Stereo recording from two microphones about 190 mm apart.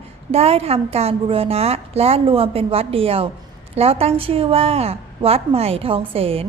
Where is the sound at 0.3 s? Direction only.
30° right (ahead or behind).